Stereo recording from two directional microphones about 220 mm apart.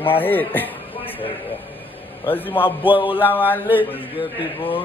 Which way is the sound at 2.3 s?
10° left (ahead or behind).